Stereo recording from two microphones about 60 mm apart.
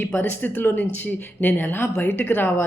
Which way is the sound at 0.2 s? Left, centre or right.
Left.